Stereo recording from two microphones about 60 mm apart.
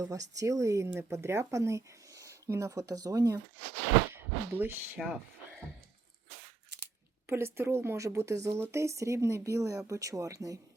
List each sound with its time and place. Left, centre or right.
0.0 s speech: right
4.1 s speech: right
5.0 s speech: centre
7.3 s a woman's voice: right
7.9 s speech: right